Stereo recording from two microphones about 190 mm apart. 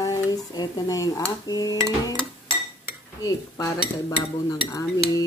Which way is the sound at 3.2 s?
20° left (ahead or behind).